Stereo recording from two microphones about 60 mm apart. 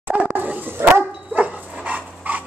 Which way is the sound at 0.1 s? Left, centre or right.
Right.